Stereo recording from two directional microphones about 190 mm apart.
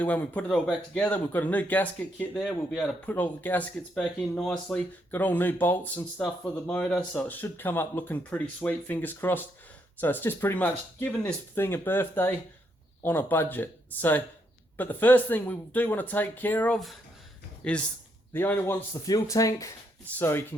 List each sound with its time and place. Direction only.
0.0 s speech: 10° left (ahead or behind)